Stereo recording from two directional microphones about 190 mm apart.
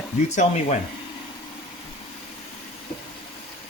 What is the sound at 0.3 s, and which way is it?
Speech, 40° left (ahead or behind).